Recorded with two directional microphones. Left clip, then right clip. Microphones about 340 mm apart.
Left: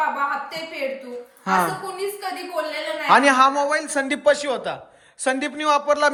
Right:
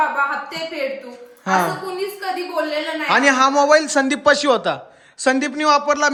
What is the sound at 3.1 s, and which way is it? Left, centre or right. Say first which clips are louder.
A man's voice: even; centre.